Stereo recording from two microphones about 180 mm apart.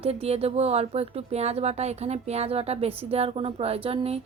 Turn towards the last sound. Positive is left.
turn(degrees=-30)  # may be behind; listen again after turning